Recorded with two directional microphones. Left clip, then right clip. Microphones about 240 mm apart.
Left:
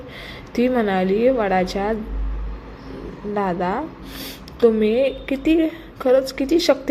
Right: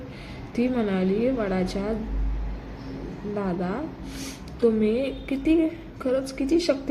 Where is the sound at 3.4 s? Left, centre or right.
Centre.